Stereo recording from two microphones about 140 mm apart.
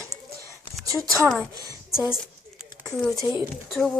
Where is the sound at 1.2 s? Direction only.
10° left (ahead or behind).